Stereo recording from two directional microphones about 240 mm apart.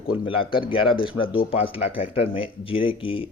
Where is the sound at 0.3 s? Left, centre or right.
Left.